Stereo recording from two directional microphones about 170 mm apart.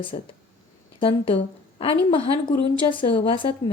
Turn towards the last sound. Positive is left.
turn(degrees=30)  # may be behind; listen again after turning